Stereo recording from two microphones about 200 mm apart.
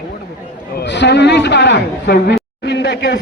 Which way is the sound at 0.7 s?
60° left (ahead or behind).